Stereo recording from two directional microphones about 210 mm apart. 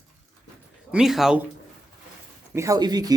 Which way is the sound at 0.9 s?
Centre (ahead or behind).